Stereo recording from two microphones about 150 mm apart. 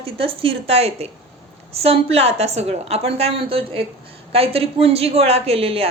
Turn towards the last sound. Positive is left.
turn(degrees=-40)  # may be behind; listen again after turning